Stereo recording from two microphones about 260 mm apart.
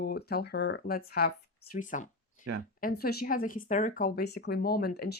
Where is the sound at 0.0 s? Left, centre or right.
Left.